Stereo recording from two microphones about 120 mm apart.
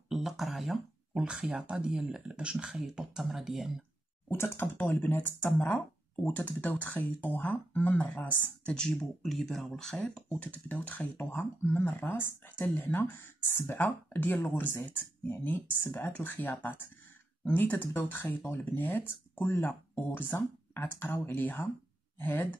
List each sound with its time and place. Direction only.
0.1 s speech: centre (ahead or behind)
4.3 s speech: 20° left (ahead or behind)